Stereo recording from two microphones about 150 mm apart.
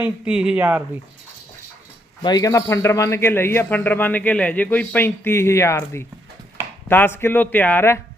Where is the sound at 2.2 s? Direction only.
25° left (ahead or behind).